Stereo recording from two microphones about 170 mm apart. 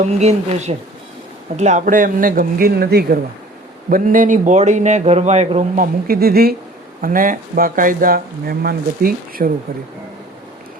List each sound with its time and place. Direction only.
0.0 s speech: 40° right (ahead or behind); by 3.2 s 65° right (ahead or behind)
3.8 s a man's voice: 55° right (ahead or behind)
7.0 s speech: 55° right (ahead or behind)